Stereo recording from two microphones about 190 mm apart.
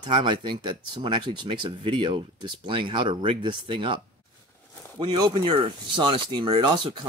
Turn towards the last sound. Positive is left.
turn(degrees=-25)  # may be behind; listen again after turning